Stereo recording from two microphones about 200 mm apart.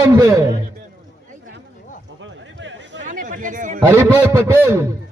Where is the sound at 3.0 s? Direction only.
40° right (ahead or behind).